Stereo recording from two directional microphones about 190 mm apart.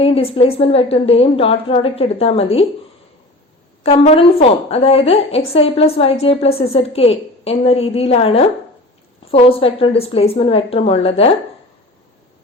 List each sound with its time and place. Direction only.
0.0 s a woman's voice: 30° left (ahead or behind)
3.8 s a woman's voice: 35° left (ahead or behind)